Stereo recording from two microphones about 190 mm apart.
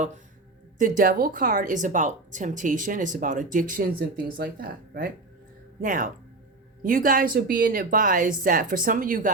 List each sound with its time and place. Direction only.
0.8 s a woman's voice: 45° right (ahead or behind)